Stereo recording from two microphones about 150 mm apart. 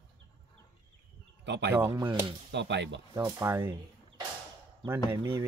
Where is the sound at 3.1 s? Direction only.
20° right (ahead or behind).